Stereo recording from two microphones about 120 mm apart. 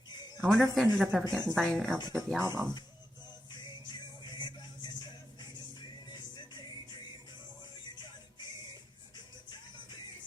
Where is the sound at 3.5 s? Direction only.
35° left (ahead or behind).